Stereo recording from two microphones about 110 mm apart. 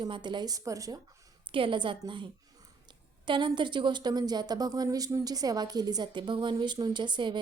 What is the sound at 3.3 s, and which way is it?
A woman's voice, 45° right (ahead or behind).